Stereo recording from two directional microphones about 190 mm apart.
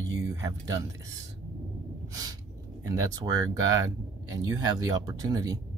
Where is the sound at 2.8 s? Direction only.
20° right (ahead or behind).